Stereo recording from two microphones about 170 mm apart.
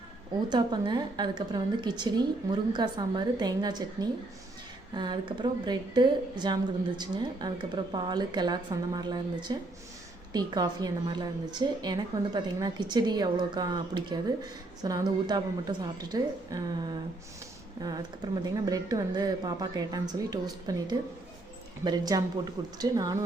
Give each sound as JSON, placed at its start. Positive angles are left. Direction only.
{"t": 0.5, "sound": "a woman's voice", "side_deg": -25}
{"t": 4.9, "sound": "a woman's voice", "side_deg": -25}
{"t": 18.6, "sound": "a woman's voice", "side_deg": -20}